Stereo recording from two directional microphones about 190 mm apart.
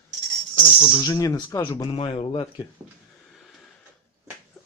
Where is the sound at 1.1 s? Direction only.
15° left (ahead or behind).